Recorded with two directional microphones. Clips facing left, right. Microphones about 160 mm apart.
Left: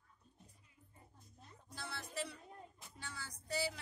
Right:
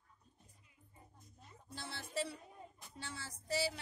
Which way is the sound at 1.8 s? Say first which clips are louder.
Right 3 dB; 25° right (ahead or behind).